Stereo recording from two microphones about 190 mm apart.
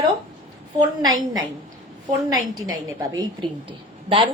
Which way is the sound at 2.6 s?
20° right (ahead or behind).